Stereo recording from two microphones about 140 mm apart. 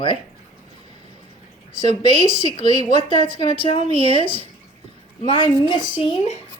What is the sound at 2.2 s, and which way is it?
Speech, 35° left (ahead or behind).